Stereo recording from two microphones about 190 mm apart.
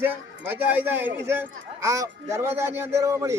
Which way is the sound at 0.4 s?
10° right (ahead or behind).